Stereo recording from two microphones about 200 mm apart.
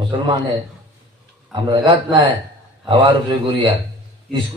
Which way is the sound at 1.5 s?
25° right (ahead or behind).